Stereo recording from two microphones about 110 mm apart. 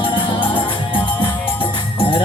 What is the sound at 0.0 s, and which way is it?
Music, 50° left (ahead or behind).